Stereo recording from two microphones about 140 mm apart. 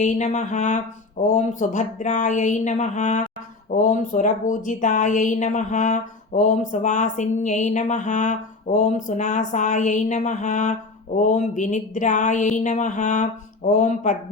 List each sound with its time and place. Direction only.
0.0 s a woman's voice: 60° left (ahead or behind)